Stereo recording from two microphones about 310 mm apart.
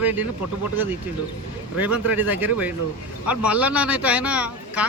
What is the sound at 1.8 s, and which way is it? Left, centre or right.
Speech, centre.